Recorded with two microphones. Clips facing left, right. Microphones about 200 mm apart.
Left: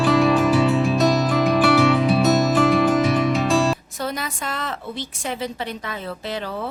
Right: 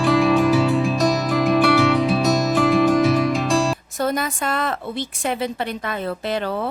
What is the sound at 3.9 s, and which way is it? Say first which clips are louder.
A woman's voice: right 5 dB; 50° right (ahead or behind).